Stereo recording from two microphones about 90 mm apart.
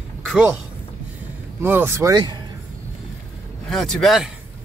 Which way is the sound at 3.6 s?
5° left (ahead or behind).